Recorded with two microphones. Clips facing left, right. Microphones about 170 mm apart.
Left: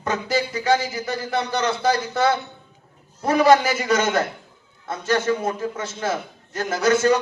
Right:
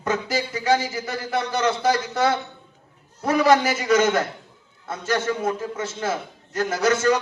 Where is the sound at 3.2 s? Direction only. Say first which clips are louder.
Left 2 dB; 30° left (ahead or behind).